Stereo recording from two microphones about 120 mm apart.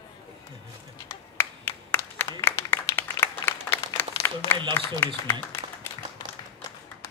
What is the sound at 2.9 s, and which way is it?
Applause, 20° left (ahead or behind).